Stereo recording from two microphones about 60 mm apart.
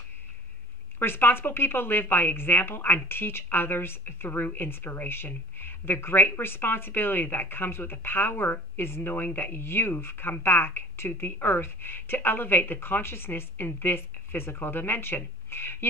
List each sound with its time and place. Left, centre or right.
0.9 s speech: left